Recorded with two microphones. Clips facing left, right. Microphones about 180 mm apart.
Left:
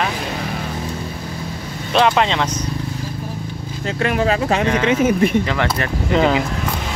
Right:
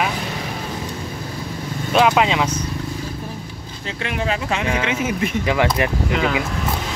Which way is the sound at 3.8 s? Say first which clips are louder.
Left 6 dB; 45° left (ahead or behind).